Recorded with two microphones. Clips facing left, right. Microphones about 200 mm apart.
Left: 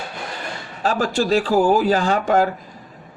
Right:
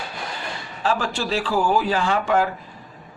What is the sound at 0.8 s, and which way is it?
Speech, 45° left (ahead or behind).